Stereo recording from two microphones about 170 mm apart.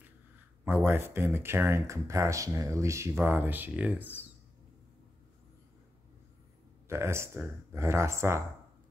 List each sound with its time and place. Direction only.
0.7 s speech: 15° right (ahead or behind)
6.9 s speech: 15° right (ahead or behind)